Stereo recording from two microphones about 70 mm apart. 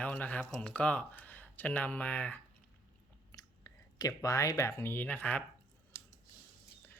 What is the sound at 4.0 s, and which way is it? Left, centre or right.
Speech, left.